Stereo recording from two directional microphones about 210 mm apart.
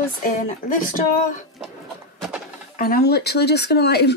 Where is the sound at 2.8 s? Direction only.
45° left (ahead or behind).